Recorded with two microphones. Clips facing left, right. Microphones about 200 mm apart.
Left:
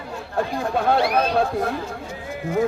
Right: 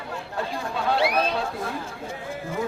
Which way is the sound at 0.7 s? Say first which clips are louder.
Left 4 dB; 50° left (ahead or behind).